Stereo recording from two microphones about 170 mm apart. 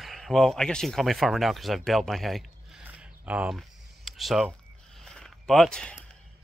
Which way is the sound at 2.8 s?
10° right (ahead or behind).